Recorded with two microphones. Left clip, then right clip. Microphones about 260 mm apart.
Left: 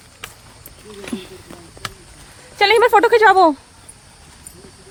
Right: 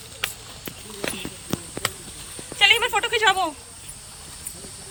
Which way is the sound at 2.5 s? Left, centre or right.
Left.